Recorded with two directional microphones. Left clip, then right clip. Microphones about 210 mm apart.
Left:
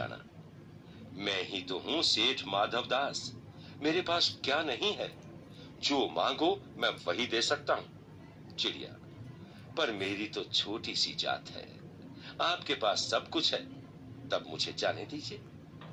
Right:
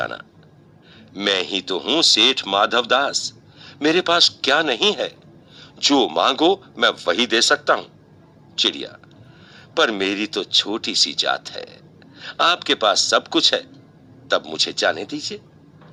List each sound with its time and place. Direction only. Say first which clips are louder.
1.1 s speech: right 14 dB; 50° right (ahead or behind)